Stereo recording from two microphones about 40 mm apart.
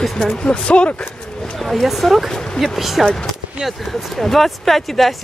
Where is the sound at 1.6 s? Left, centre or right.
Centre.